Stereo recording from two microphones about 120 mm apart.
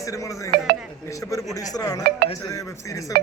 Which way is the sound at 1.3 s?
30° left (ahead or behind).